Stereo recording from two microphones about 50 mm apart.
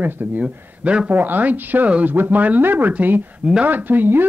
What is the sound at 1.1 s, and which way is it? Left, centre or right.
Speech, right.